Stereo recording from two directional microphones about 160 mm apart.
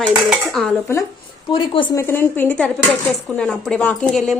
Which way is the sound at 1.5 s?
30° left (ahead or behind).